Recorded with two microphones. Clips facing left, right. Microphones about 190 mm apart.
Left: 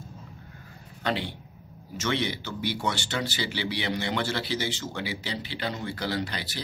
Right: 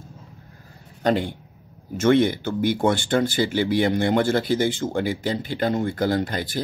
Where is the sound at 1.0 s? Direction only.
45° right (ahead or behind).